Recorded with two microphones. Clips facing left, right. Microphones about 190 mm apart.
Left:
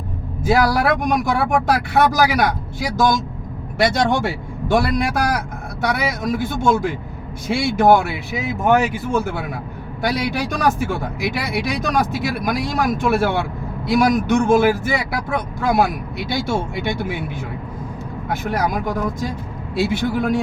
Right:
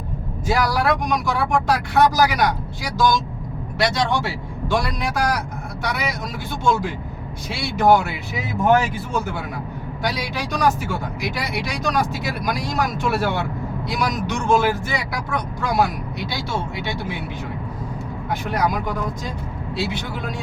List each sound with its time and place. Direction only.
0.4 s speech: 50° left (ahead or behind)
10.0 s speech: 50° left (ahead or behind)
18.4 s speech: 50° left (ahead or behind)